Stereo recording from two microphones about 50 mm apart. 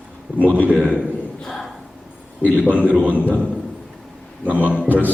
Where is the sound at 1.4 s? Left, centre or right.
Centre.